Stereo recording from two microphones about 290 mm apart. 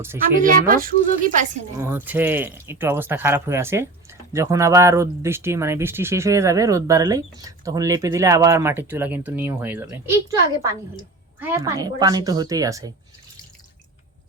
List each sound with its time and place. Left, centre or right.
0.3 s speech: right
1.8 s speech: centre
11.3 s speech: centre